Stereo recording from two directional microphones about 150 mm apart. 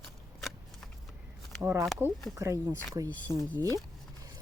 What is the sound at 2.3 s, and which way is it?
Speech, 20° right (ahead or behind).